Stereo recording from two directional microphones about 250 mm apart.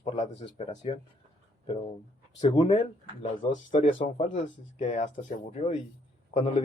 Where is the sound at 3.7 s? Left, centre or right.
Left.